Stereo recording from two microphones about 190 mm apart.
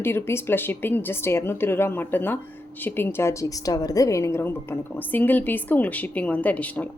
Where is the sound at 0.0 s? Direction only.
10° left (ahead or behind).